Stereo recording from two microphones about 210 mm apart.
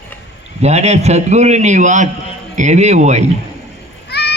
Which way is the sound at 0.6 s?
30° right (ahead or behind).